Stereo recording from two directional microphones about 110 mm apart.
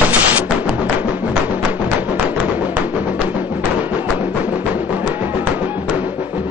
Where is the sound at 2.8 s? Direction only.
15° right (ahead or behind).